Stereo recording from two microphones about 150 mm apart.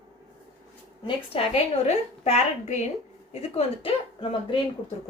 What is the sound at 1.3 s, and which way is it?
A woman's voice, 40° left (ahead or behind).